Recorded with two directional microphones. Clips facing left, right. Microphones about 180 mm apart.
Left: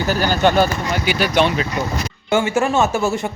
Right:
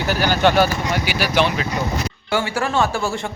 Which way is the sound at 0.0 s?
10° right (ahead or behind).